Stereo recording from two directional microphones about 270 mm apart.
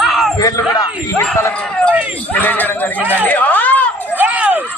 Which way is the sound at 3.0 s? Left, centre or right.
Centre.